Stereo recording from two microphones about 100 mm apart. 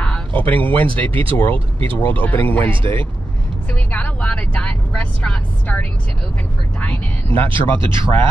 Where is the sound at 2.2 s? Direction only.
15° left (ahead or behind).